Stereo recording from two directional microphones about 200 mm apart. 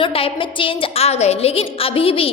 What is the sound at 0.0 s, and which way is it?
A woman's voice, 25° left (ahead or behind).